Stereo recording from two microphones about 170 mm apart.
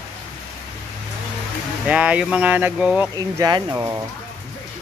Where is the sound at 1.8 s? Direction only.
5° right (ahead or behind).